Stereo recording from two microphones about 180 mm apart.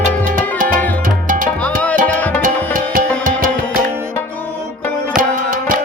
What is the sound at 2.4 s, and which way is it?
Music, 50° right (ahead or behind).